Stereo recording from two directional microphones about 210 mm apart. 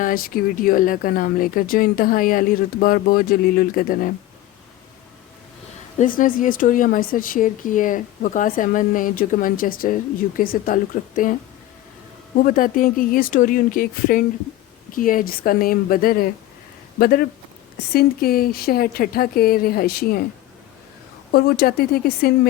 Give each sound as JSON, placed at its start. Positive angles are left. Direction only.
{"t": 0.0, "sound": "speech", "side_deg": 45}
{"t": 6.0, "sound": "a woman's voice", "side_deg": 40}
{"t": 12.4, "sound": "a woman's voice", "side_deg": 40}
{"t": 21.3, "sound": "speech", "side_deg": 45}